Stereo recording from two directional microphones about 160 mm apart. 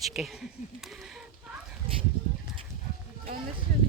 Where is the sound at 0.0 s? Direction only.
Centre (ahead or behind).